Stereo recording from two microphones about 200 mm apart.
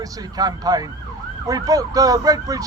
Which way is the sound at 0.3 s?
20° right (ahead or behind).